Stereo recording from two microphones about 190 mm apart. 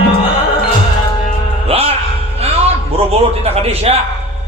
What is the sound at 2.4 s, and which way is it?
A man's voice, 30° right (ahead or behind).